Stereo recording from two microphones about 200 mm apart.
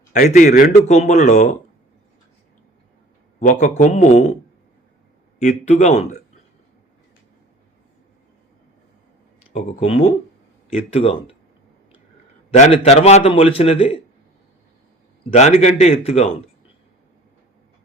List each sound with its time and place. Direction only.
0.1 s a man's voice: 40° left (ahead or behind)
3.4 s a man's voice: 40° left (ahead or behind)
5.4 s a man's voice: 35° left (ahead or behind)
9.5 s a man's voice: 30° left (ahead or behind)
12.5 s a man's voice: 30° left (ahead or behind)
15.3 s a man's voice: 30° left (ahead or behind)